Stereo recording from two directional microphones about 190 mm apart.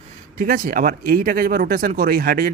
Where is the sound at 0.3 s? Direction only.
45° right (ahead or behind).